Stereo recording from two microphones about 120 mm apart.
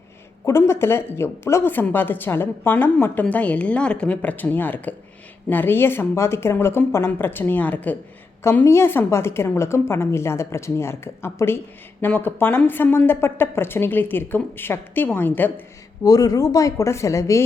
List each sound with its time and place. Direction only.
0.4 s speech: 25° left (ahead or behind)
16.0 s speech: 30° left (ahead or behind)